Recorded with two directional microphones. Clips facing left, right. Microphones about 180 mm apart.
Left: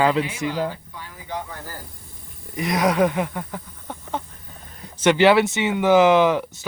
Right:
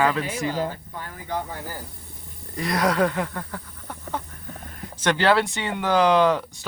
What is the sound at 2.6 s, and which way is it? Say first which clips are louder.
Speech: left 2 dB; 20° left (ahead or behind).